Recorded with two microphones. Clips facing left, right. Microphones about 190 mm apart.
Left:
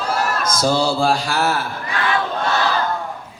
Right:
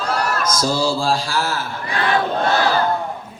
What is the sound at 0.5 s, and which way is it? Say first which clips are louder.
Speech: left 4 dB; 60° left (ahead or behind).